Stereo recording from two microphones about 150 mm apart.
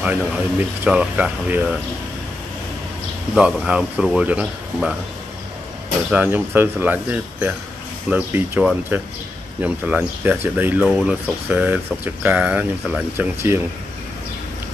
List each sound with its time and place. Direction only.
0.0 s speech: 10° right (ahead or behind)
3.3 s speech: 5° right (ahead or behind)
6.0 s speech: 10° right (ahead or behind)